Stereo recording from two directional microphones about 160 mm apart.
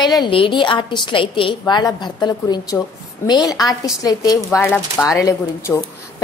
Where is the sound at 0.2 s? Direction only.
30° left (ahead or behind).